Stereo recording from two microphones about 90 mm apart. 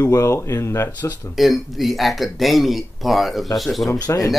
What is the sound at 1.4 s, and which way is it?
Speech, centre (ahead or behind).